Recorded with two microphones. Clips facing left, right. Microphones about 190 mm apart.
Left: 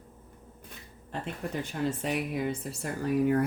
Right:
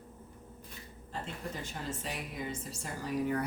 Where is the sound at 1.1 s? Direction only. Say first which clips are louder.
Left 6 dB; 60° left (ahead or behind).